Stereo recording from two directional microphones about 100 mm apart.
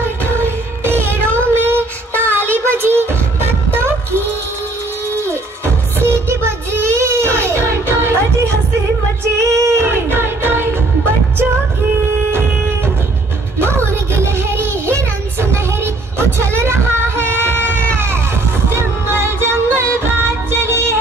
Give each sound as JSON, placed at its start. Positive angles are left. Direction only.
{"t": 0.0, "sound": "music", "side_deg": -25}
{"t": 5.9, "sound": "child singing", "side_deg": -25}
{"t": 9.4, "sound": "music", "side_deg": -30}
{"t": 13.6, "sound": "music", "side_deg": -25}